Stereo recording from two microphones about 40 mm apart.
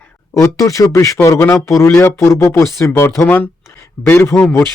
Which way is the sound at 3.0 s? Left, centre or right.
Left.